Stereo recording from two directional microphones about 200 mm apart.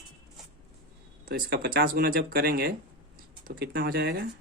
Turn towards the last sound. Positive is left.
turn(degrees=-55)  # may be behind; listen again after turning